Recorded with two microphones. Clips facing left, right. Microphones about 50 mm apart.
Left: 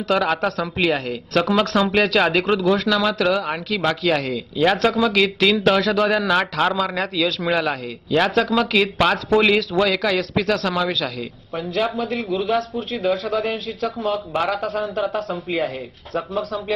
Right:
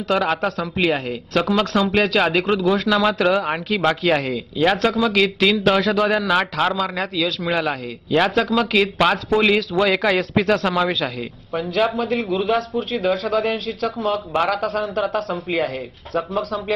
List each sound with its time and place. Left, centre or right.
0.1 s a man's voice: centre
2.9 s speech: centre
4.2 s a man's voice: centre
9.8 s a man's voice: centre